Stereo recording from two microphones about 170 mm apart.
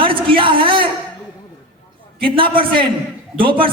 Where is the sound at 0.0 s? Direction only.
30° right (ahead or behind).